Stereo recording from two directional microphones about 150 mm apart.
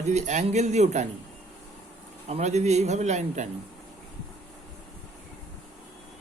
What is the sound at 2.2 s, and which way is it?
Speech, 45° right (ahead or behind).